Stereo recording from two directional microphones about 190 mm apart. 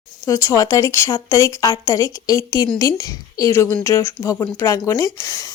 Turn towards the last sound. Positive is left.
turn(degrees=20)  # may be behind; listen again after turning